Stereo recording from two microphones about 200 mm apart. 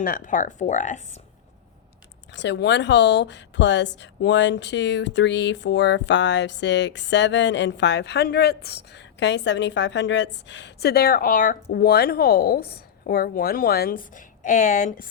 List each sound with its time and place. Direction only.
0.0 s speech: 40° left (ahead or behind)
2.3 s speech: 65° left (ahead or behind); by 15.0 s 40° left (ahead or behind)